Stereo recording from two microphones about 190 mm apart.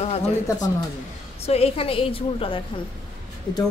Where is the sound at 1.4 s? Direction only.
30° left (ahead or behind).